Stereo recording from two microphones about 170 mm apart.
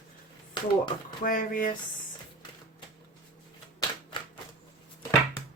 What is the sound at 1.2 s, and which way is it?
Speech, 55° left (ahead or behind).